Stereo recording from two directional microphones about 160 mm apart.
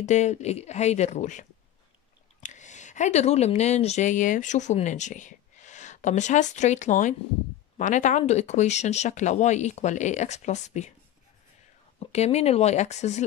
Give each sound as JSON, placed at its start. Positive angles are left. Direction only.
{"t": 0.0, "sound": "speech", "side_deg": 45}
{"t": 2.4, "sound": "speech", "side_deg": 50}
{"t": 12.0, "sound": "speech", "side_deg": 40}